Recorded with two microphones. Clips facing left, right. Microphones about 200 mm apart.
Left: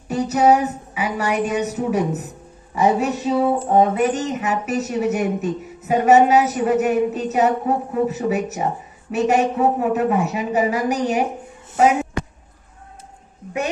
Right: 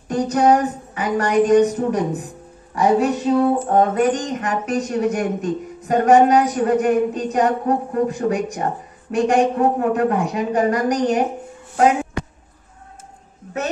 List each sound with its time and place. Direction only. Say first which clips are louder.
0.1 s speech: even; 5° left (ahead or behind)
2.7 s music: right 2 dB; 5° left (ahead or behind)
3.3 s speech: even; 5° left (ahead or behind)